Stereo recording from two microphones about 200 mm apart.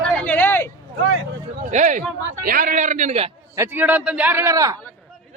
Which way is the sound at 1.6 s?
40° right (ahead or behind).